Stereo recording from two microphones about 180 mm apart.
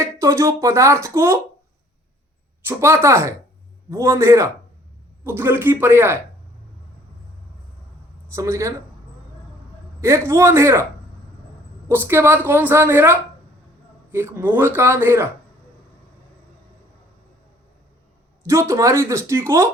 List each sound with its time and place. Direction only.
0.0 s speech: 15° right (ahead or behind)
2.6 s speech: 15° right (ahead or behind)
8.3 s speech: 15° right (ahead or behind)
10.0 s speech: 15° right (ahead or behind)
11.9 s speech: 15° right (ahead or behind)
18.7 s speech: 15° right (ahead or behind)